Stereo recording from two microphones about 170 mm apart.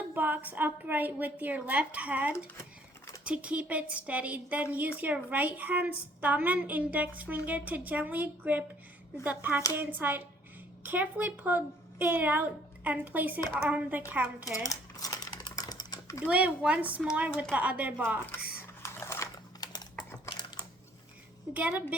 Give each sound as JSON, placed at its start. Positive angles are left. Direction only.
{"t": 0.1, "sound": "a woman's voice", "side_deg": -10}
{"t": 14.6, "sound": "typing", "side_deg": 20}
{"t": 16.2, "sound": "a woman's voice", "side_deg": -5}
{"t": 18.8, "sound": "typing", "side_deg": 15}
{"t": 21.5, "sound": "a woman's voice", "side_deg": -10}